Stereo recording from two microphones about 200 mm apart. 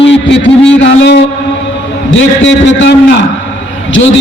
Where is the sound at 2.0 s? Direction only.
70° left (ahead or behind).